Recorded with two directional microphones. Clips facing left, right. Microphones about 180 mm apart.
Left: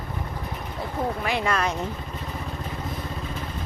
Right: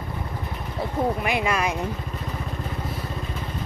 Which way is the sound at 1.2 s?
10° right (ahead or behind).